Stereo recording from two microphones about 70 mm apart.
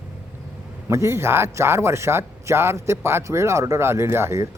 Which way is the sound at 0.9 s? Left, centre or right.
Right.